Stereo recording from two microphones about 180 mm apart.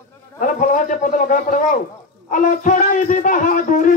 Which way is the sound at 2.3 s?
45° left (ahead or behind).